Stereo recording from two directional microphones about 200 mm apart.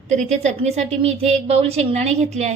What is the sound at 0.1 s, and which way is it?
A woman's voice, 35° right (ahead or behind).